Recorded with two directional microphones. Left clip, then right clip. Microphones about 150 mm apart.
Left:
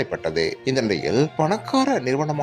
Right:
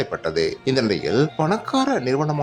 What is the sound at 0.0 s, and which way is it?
Speech, 20° left (ahead or behind).